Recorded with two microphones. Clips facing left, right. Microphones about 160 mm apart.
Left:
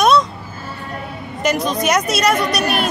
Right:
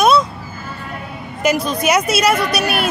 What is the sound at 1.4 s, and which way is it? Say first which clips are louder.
A woman's voice: right 1 dB; centre (ahead or behind).